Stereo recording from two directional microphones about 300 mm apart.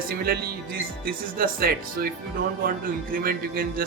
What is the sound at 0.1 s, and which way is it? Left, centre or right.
Speech, right.